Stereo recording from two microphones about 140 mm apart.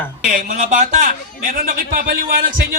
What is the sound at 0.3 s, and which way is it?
A man's voice, 75° right (ahead or behind).